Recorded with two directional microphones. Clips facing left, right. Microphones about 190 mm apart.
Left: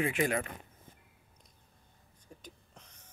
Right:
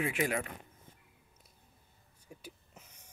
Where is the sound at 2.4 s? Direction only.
10° right (ahead or behind).